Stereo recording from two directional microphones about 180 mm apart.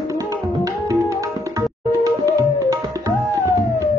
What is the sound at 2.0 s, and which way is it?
Tabla, 20° right (ahead or behind).